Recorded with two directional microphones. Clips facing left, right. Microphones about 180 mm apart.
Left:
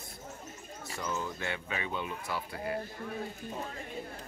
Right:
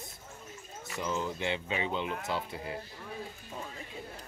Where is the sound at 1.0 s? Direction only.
20° right (ahead or behind).